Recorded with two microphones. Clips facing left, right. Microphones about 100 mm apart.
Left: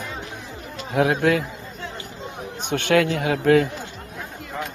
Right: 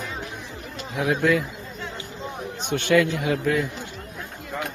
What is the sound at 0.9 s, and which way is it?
Speech, 55° left (ahead or behind).